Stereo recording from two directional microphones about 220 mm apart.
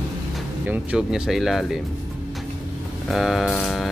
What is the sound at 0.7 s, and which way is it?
Speech, 5° right (ahead or behind).